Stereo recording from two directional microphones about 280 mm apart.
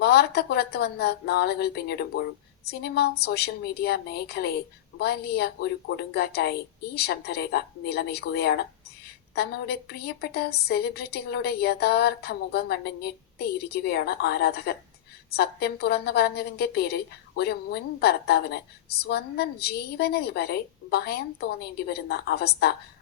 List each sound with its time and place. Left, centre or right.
0.0 s a woman's voice: left